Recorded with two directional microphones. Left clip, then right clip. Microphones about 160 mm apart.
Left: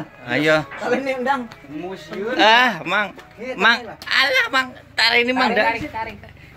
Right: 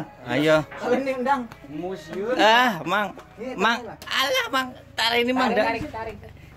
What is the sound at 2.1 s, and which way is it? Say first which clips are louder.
Speech: left 4 dB; 15° right (ahead or behind).